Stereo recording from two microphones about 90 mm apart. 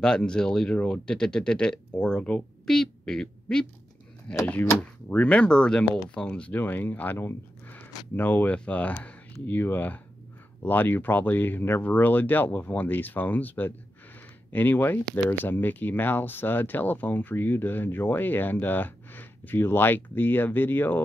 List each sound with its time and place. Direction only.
0.0 s speech: 10° left (ahead or behind)